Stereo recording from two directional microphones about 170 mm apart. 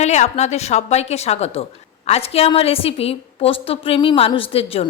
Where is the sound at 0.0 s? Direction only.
40° left (ahead or behind).